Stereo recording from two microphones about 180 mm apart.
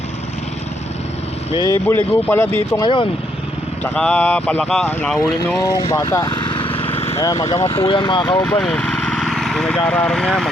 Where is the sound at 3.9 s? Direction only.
5° left (ahead or behind).